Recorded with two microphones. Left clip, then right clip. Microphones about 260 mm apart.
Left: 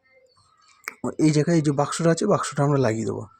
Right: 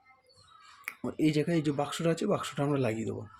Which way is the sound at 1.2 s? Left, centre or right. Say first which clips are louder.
Left 8 dB; left.